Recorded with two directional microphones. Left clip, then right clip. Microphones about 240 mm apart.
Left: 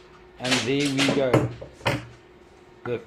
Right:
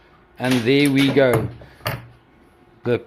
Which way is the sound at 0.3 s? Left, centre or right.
Right.